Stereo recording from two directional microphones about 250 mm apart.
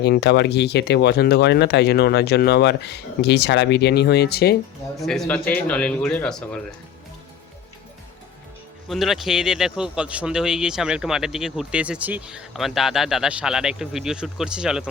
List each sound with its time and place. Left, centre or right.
0.0 s speech: left
4.9 s speech: centre
8.9 s speech: centre